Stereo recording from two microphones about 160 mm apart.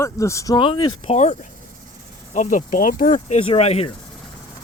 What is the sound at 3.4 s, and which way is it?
Speech, 40° left (ahead or behind).